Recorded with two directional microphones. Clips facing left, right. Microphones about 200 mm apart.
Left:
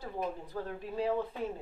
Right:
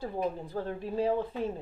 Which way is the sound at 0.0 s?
30° right (ahead or behind).